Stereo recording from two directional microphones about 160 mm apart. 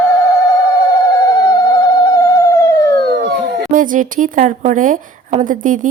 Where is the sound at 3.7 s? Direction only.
55° right (ahead or behind).